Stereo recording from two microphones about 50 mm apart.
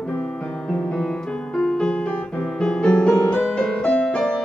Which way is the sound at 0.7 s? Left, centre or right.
Centre.